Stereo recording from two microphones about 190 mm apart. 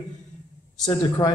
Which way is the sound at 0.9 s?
20° left (ahead or behind).